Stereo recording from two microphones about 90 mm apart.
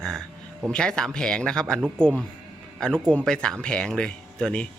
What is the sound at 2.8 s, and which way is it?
Speech, 10° left (ahead or behind).